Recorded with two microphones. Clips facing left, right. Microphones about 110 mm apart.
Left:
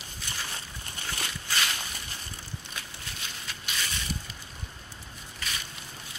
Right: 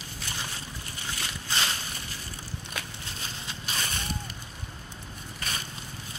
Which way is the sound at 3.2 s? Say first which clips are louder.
Right 2 dB; 30° right (ahead or behind).